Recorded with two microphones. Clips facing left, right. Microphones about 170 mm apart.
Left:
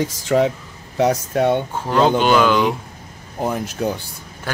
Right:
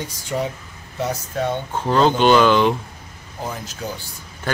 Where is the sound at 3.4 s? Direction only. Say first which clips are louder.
Left 8 dB; 60° left (ahead or behind).